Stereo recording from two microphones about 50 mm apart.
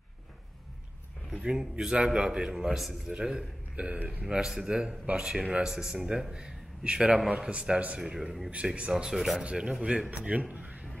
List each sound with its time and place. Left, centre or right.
1.3 s a man's voice: centre
6.3 s a man's voice: centre
8.1 s a man's voice: centre
8.5 s speech: right
8.9 s a man's voice: centre
9.4 s a man's voice: centre
10.5 s a sound: right